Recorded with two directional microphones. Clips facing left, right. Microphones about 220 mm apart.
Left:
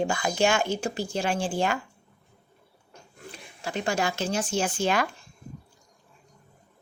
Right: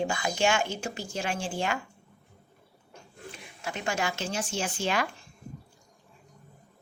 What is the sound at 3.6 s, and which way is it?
Speech, 30° left (ahead or behind).